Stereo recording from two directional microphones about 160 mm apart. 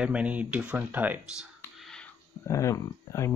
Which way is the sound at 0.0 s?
5° right (ahead or behind).